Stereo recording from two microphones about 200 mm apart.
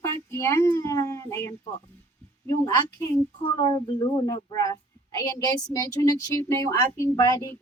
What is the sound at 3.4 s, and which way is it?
A woman's voice, 20° left (ahead or behind).